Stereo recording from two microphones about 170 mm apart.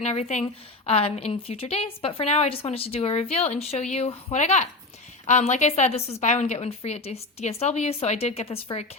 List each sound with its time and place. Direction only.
0.0 s a woman's voice: 40° left (ahead or behind)